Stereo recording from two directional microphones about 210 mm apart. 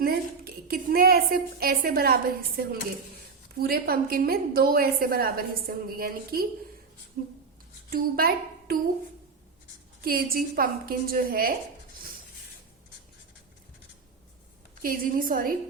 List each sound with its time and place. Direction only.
0.0 s a sound: 45° right (ahead or behind)
3.6 s a woman's voice: 45° right (ahead or behind)
10.0 s a woman's voice: 45° right (ahead or behind)
14.8 s a woman's voice: 40° right (ahead or behind)